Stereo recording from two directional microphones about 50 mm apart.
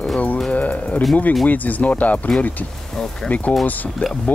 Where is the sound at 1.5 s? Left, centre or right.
Left.